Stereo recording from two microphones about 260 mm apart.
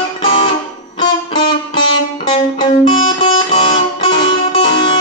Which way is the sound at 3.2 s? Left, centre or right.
Centre.